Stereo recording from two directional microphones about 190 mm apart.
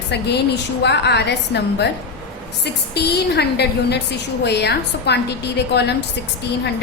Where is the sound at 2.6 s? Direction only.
60° left (ahead or behind).